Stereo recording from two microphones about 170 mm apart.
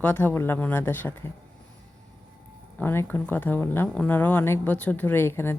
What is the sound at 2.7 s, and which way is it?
Speech, 15° left (ahead or behind).